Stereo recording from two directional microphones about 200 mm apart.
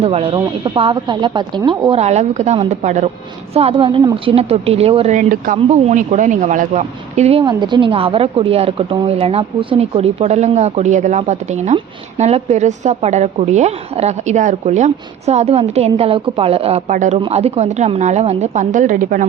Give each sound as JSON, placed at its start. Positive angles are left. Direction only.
{"t": 0.0, "sound": "a woman's voice", "side_deg": -30}